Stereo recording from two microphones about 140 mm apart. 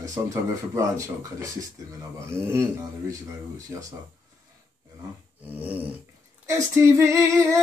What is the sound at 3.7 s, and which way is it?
Female singing, 20° right (ahead or behind).